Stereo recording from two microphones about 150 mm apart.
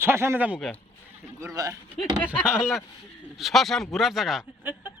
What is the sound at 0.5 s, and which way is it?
Speech, centre (ahead or behind).